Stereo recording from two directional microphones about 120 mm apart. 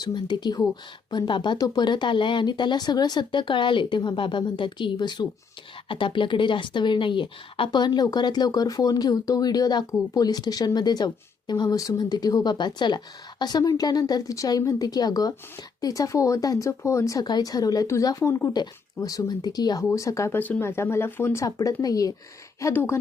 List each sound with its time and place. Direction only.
0.0 s speech: 40° left (ahead or behind)
22.6 s speech: 20° left (ahead or behind)